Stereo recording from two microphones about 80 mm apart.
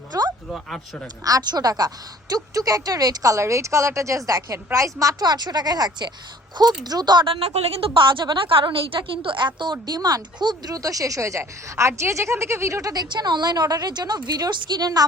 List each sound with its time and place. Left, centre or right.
0.1 s a sound: right
1.2 s a woman's voice: right
7.9 s a woman's voice: right
9.8 s speech: right
12.9 s a woman's voice: right